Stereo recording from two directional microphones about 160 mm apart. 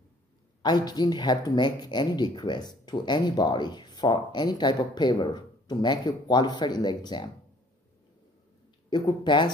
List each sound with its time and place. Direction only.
0.6 s speech: 25° left (ahead or behind)
8.9 s speech: 25° left (ahead or behind)